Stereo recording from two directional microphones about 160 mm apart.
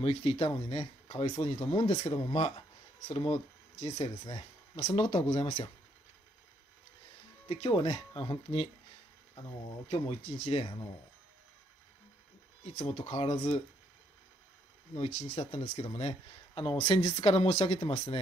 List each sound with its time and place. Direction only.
0.0 s speech: 35° left (ahead or behind)
7.4 s speech: 35° left (ahead or behind)
9.8 s speech: 45° left (ahead or behind)
12.6 s speech: 40° left (ahead or behind)
15.0 s speech: 45° left (ahead or behind)